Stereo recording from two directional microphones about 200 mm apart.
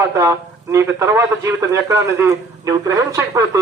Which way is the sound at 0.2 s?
15° right (ahead or behind).